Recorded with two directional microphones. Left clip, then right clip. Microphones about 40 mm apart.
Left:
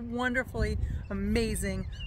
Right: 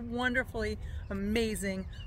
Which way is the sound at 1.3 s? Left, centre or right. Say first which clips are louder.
Left 1 dB; left.